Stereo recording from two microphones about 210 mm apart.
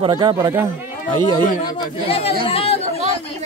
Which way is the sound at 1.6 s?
25° left (ahead or behind).